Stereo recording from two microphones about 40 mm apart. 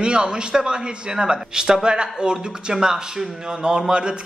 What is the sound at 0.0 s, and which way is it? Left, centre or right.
Speech, right.